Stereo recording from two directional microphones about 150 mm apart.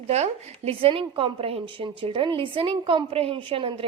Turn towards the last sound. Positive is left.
turn(degrees=-35)  # may be behind; listen again after turning